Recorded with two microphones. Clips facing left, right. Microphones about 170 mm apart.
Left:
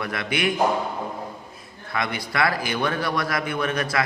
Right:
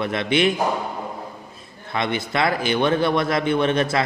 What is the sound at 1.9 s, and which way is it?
A man's voice, 25° right (ahead or behind).